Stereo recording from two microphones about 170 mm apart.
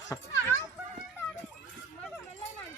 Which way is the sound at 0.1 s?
20° left (ahead or behind).